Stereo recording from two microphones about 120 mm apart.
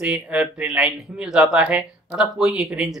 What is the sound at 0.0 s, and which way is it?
Speech, 10° right (ahead or behind).